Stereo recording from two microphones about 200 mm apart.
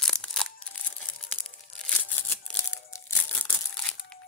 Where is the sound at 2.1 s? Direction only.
10° left (ahead or behind).